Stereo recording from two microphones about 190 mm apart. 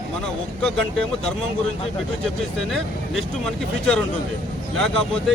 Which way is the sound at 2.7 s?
5° left (ahead or behind).